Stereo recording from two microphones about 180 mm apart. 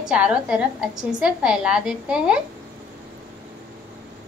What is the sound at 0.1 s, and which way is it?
A woman's voice, 5° right (ahead or behind).